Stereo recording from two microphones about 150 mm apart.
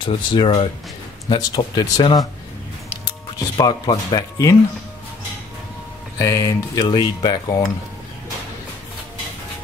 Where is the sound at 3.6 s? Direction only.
25° left (ahead or behind).